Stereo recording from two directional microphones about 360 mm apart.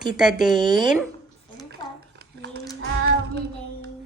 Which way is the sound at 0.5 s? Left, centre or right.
Centre.